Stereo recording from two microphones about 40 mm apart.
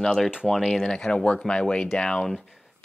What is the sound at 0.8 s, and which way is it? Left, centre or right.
Speech, centre.